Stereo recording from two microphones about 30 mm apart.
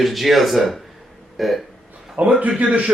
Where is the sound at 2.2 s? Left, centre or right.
Right.